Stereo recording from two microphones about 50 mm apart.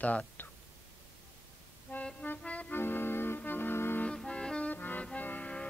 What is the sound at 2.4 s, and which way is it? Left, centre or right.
Music, left.